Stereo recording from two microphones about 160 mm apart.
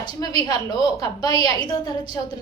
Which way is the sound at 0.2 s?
25° left (ahead or behind).